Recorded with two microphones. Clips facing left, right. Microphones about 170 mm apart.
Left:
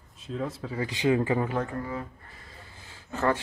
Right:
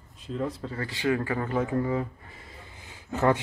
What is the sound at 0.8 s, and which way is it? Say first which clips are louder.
Speech: left 3 dB; 20° left (ahead or behind).